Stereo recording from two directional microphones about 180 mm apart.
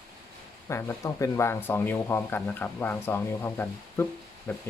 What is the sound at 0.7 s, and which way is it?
Speech, 15° left (ahead or behind).